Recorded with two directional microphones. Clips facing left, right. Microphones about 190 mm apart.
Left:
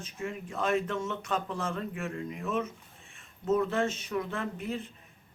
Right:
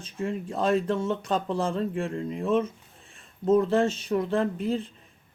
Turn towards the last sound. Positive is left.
turn(degrees=-30)  # may be behind; listen again after turning